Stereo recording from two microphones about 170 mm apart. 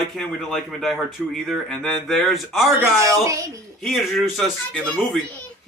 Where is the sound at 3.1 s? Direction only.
20° right (ahead or behind).